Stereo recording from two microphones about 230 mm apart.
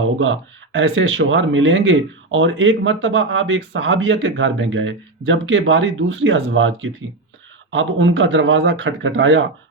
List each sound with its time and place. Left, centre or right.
0.2 s speech: right